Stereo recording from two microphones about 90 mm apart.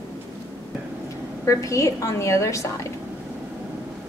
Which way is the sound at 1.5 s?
35° left (ahead or behind).